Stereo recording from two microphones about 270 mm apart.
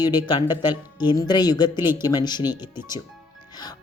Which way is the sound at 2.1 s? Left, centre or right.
Centre.